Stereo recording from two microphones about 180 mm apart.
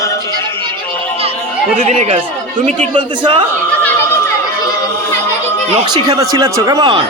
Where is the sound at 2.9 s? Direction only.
30° right (ahead or behind).